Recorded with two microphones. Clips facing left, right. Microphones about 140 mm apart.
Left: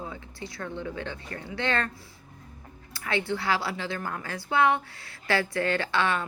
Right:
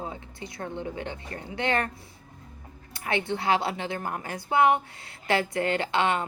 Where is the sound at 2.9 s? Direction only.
20° right (ahead or behind).